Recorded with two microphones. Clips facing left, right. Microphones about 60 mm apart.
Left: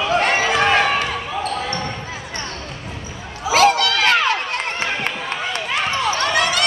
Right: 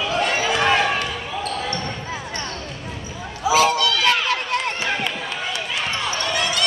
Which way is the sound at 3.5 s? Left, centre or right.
Left.